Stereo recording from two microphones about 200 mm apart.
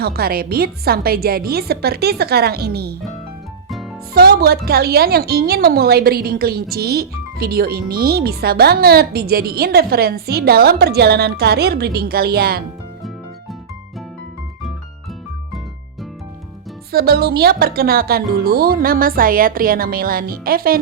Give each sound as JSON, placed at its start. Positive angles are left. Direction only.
{"t": 0.0, "sound": "a woman's voice", "side_deg": -50}
{"t": 3.7, "sound": "music", "side_deg": 0}
{"t": 4.1, "sound": "a woman's voice", "side_deg": -50}
{"t": 16.9, "sound": "a woman's voice", "side_deg": -50}